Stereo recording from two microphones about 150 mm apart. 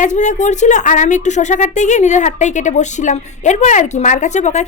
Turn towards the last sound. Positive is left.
turn(degrees=50)  # may be behind; listen again after turning